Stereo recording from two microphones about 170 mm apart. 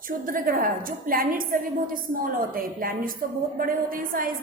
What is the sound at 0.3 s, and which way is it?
A woman's voice, 55° right (ahead or behind).